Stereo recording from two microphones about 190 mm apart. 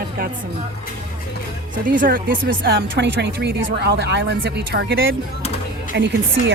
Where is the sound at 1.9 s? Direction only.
45° right (ahead or behind).